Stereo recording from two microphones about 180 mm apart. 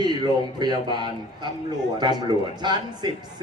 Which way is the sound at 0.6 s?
25° right (ahead or behind).